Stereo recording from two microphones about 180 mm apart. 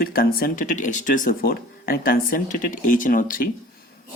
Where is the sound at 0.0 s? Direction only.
55° left (ahead or behind).